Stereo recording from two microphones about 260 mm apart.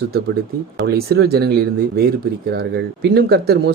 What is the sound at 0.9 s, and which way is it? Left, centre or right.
Speech, right.